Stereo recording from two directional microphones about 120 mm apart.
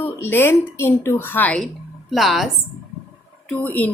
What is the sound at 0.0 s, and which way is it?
A woman's voice, 20° left (ahead or behind).